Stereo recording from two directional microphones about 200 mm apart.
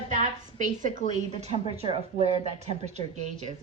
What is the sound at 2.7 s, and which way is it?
Speech, 35° right (ahead or behind).